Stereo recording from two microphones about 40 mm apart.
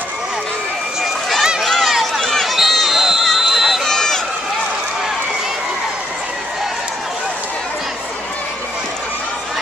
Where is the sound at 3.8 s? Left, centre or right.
Centre.